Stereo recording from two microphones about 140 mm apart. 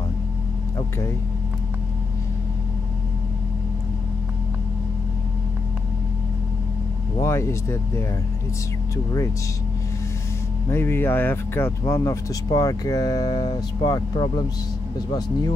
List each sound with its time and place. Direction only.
7.2 s speech: 20° left (ahead or behind)
8.9 s speech: 20° left (ahead or behind)
10.7 s speech: 15° left (ahead or behind)